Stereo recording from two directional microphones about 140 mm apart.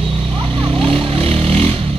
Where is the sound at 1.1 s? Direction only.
40° right (ahead or behind).